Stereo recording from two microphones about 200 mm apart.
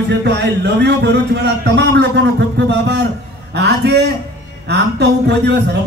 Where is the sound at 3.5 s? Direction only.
55° right (ahead or behind).